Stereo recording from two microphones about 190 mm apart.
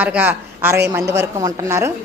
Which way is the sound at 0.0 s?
10° right (ahead or behind).